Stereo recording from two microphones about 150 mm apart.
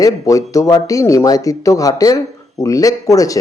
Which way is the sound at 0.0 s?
20° left (ahead or behind).